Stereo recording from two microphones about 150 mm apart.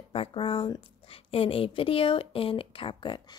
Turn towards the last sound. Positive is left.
turn(degrees=35)  # may be behind; listen again after turning